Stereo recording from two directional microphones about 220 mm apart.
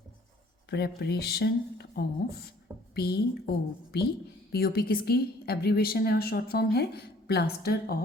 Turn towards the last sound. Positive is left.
turn(degrees=45)  # may be behind; listen again after turning